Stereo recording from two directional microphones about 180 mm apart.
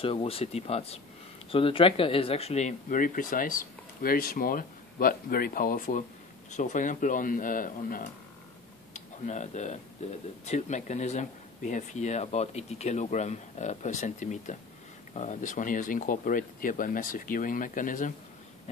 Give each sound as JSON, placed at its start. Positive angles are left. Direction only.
{"t": 0.0, "sound": "speech", "side_deg": 30}